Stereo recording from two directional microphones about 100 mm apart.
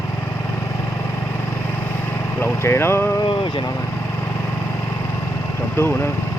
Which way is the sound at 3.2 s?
55° left (ahead or behind).